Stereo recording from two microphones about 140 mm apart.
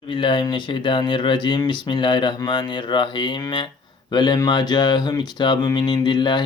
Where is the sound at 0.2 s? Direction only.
35° left (ahead or behind).